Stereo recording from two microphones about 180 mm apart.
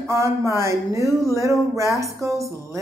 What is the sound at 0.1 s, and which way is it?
Speech, 15° right (ahead or behind).